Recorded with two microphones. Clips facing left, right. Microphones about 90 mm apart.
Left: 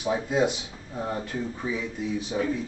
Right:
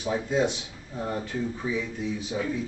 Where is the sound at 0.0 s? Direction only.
10° left (ahead or behind).